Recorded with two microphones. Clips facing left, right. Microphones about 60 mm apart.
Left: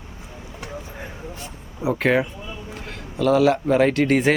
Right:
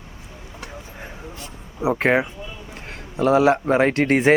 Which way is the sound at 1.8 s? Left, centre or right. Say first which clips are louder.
Right 1 dB; right.